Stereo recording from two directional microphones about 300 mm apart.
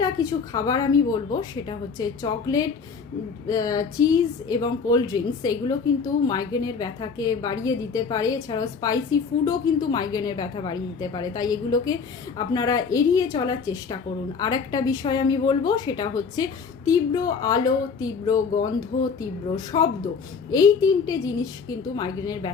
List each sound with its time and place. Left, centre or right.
0.0 s speech: centre
19.7 s speech: centre